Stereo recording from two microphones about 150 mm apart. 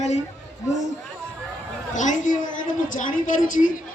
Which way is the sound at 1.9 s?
55° left (ahead or behind).